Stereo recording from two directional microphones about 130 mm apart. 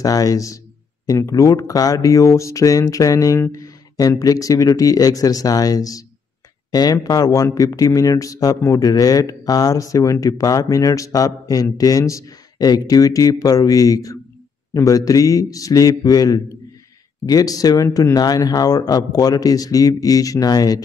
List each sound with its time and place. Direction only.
0.0 s speech: 25° left (ahead or behind)